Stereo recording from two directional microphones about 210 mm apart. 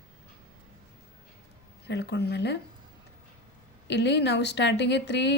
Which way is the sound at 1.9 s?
55° left (ahead or behind).